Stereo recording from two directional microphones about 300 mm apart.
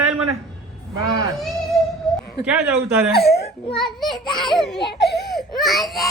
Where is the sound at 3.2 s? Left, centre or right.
Left.